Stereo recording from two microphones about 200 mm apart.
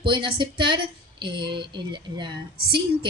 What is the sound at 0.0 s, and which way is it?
A woman's voice, 25° right (ahead or behind).